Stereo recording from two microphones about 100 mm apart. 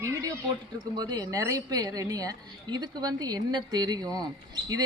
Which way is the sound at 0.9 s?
40° right (ahead or behind).